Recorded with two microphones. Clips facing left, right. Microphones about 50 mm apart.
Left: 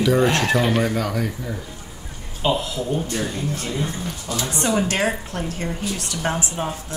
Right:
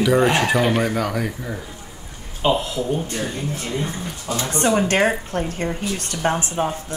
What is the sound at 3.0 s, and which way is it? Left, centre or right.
Speech, right.